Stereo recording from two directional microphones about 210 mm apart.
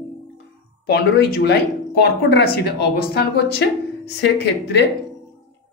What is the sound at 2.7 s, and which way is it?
A woman's voice, 50° left (ahead or behind).